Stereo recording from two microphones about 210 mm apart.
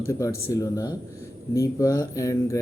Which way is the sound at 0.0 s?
15° left (ahead or behind).